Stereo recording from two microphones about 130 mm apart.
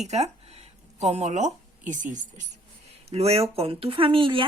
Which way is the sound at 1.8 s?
75° right (ahead or behind).